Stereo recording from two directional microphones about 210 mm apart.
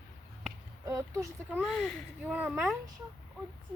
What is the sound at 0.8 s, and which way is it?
Speech, 15° right (ahead or behind).